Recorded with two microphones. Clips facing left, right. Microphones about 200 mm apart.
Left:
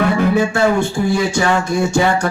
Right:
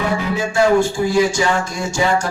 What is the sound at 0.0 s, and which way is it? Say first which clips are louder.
Music: left 6 dB; 60° left (ahead or behind).